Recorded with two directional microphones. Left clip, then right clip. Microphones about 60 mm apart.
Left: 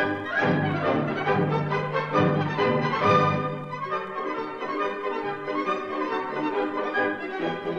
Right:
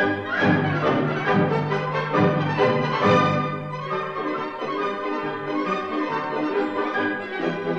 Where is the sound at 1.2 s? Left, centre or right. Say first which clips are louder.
Right 3 dB; centre.